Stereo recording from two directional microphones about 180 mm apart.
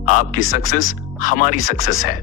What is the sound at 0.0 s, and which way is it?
Speech, 45° left (ahead or behind).